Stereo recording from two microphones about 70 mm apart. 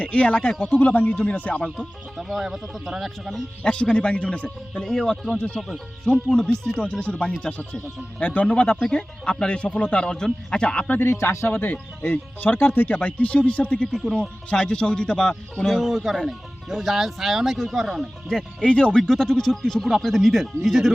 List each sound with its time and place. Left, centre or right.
0.0 s a man's voice: centre
1.8 s speech: centre
3.6 s a man's voice: centre
7.0 s a man's voice: centre
13.9 s a man's voice: centre
18.3 s speech: centre